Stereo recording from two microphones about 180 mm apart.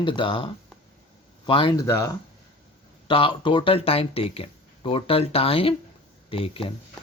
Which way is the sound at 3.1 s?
30° left (ahead or behind).